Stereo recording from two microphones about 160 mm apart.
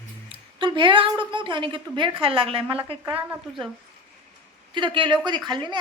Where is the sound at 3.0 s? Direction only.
10° right (ahead or behind).